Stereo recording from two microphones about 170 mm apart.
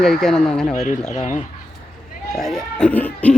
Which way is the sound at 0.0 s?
5° left (ahead or behind).